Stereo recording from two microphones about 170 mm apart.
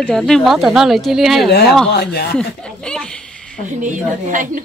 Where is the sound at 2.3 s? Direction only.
5° left (ahead or behind).